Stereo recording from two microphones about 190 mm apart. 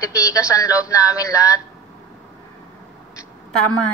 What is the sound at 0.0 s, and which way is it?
A woman's voice, 15° left (ahead or behind).